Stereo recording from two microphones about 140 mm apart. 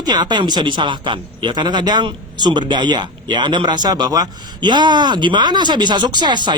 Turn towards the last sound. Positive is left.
turn(degrees=-30)  # may be behind; listen again after turning